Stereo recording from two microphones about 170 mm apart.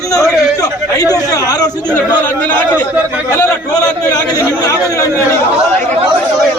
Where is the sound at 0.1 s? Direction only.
20° left (ahead or behind).